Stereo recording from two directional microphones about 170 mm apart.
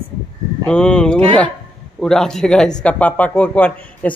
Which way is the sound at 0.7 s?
5° left (ahead or behind).